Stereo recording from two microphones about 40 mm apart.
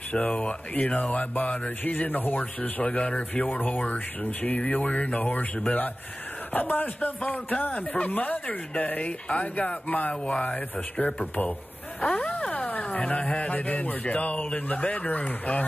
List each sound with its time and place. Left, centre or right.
0.4 s speech: left
2.9 s speech: left
7.7 s speech: left
10.5 s speech: left
12.0 s a sound: left
12.5 s a sound: left
13.2 s speech: left